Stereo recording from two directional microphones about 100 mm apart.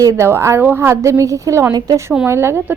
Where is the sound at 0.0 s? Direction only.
30° right (ahead or behind).